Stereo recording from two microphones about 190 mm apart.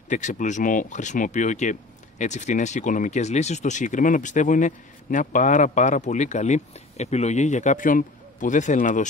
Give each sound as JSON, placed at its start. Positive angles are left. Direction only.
{"t": 0.1, "sound": "speech", "side_deg": 40}